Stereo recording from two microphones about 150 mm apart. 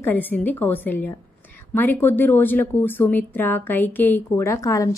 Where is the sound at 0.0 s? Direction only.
10° left (ahead or behind).